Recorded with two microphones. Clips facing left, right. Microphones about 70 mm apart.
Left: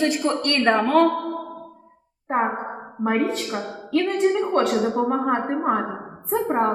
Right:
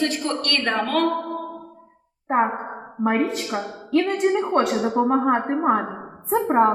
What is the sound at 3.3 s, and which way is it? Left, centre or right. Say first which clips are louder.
A woman's voice: even; centre.